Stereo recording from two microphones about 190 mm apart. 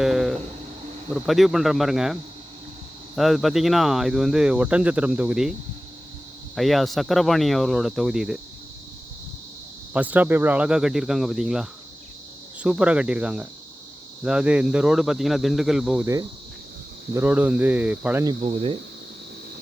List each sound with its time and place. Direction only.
0.0 s a sound: centre (ahead or behind)
1.1 s speech: centre (ahead or behind)
3.2 s speech: centre (ahead or behind)
6.6 s speech: centre (ahead or behind)
9.9 s speech: 10° right (ahead or behind)
17.2 s speech: 10° right (ahead or behind)
18.4 s speech: 30° right (ahead or behind)